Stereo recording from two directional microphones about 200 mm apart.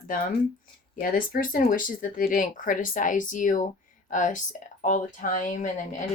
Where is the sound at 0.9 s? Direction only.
45° left (ahead or behind).